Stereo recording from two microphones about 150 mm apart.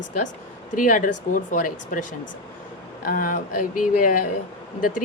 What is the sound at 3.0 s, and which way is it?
Speech, 65° left (ahead or behind).